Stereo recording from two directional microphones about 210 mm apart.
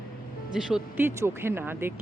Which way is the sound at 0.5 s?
5° right (ahead or behind).